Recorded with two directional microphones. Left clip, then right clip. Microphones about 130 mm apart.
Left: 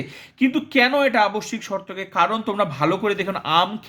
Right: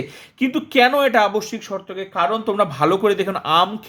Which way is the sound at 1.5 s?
10° left (ahead or behind).